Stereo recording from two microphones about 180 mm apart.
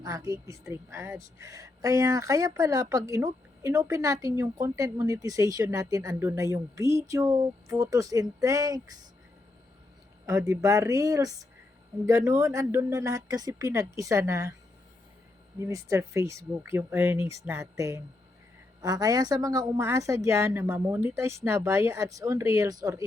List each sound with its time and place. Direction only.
0.0 s a woman's voice: 20° right (ahead or behind)
10.2 s a woman's voice: 15° right (ahead or behind)
15.5 s a woman's voice: 15° right (ahead or behind)